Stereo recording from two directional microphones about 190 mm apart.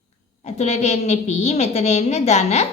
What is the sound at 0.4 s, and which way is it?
A woman's voice, 35° left (ahead or behind).